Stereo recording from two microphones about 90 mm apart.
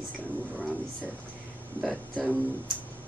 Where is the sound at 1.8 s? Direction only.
Centre (ahead or behind).